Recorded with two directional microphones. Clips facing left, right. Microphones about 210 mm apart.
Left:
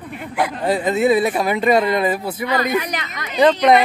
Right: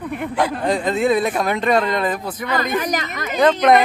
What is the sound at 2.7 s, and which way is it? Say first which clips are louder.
Speech: right 1 dB; 45° right (ahead or behind).